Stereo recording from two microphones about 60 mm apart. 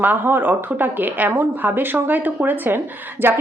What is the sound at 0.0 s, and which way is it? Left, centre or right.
Speech, right.